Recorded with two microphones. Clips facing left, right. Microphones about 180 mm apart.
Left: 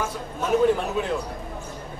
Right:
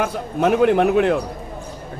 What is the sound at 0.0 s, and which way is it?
A man's voice, 65° right (ahead or behind).